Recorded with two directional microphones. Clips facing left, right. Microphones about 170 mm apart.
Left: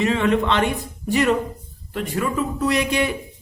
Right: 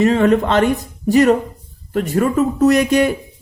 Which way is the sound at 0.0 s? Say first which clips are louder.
Right 6 dB; 40° right (ahead or behind).